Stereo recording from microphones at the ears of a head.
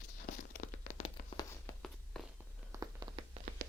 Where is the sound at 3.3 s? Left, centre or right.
Right.